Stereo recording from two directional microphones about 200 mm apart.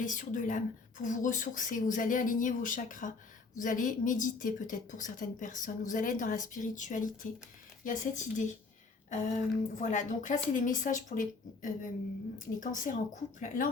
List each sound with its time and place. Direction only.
0.0 s a woman's voice: 40° left (ahead or behind)